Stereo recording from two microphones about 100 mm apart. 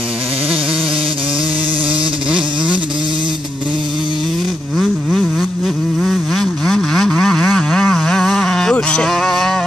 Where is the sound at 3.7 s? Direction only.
50° right (ahead or behind).